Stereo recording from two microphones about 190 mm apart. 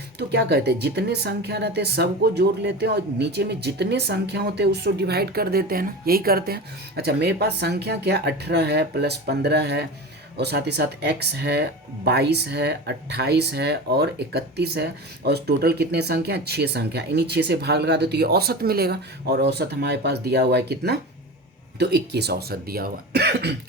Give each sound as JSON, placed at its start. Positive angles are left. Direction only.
{"t": 0.2, "sound": "speech", "side_deg": -60}